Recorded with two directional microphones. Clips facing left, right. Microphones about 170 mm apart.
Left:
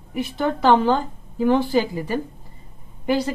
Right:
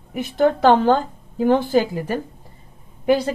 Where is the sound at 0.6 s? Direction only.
50° right (ahead or behind).